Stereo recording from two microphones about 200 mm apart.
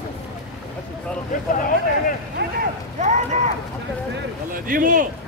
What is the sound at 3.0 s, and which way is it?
Speech, 35° right (ahead or behind).